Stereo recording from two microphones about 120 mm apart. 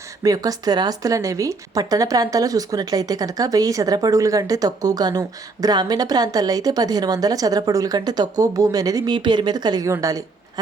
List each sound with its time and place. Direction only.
0.2 s a woman's voice: 30° right (ahead or behind)